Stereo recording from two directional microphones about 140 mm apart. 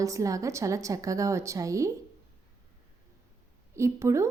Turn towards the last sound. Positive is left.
turn(degrees=-20)  # may be behind; listen again after turning